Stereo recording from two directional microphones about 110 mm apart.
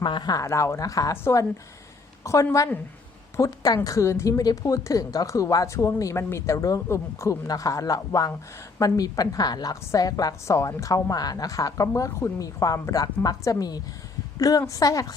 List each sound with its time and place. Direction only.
0.0 s a woman's voice: 45° left (ahead or behind)